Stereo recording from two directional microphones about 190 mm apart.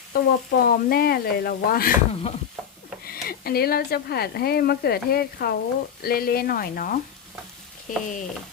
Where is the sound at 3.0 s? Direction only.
50° left (ahead or behind).